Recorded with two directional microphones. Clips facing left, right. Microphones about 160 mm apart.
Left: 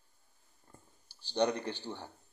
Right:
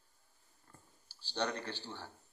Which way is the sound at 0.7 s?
15° left (ahead or behind).